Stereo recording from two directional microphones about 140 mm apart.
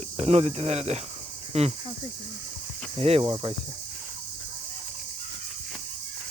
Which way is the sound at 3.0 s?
45° right (ahead or behind).